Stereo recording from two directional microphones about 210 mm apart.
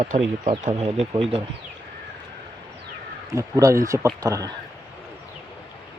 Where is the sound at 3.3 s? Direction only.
15° right (ahead or behind).